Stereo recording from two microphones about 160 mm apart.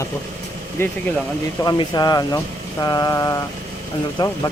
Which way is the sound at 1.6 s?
25° left (ahead or behind).